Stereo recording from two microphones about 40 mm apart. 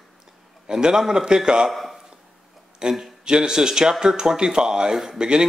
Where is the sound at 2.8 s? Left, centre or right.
Centre.